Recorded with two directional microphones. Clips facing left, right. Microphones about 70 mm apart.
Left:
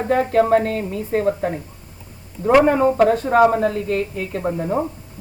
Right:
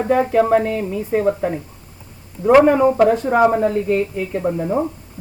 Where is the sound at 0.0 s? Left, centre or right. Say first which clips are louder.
Right 1 dB; centre.